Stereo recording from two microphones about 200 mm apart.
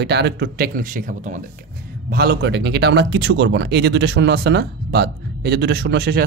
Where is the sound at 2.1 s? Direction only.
50° right (ahead or behind).